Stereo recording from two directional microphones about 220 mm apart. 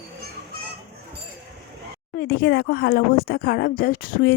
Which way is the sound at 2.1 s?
45° left (ahead or behind).